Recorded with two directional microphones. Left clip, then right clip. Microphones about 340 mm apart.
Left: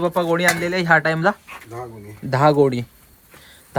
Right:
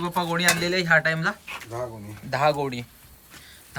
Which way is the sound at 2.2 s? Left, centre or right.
Centre.